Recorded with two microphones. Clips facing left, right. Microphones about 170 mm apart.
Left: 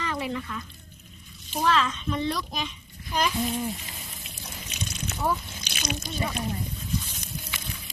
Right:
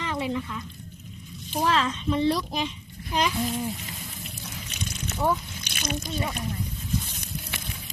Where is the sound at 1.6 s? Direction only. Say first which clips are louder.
Even; 30° right (ahead or behind).